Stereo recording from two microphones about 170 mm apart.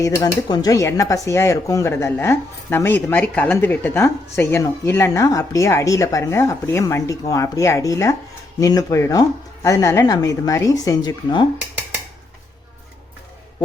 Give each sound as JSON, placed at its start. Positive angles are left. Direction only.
{"t": 0.0, "sound": "speech", "side_deg": 20}